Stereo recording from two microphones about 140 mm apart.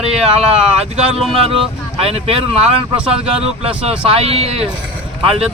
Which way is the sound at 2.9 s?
5° right (ahead or behind).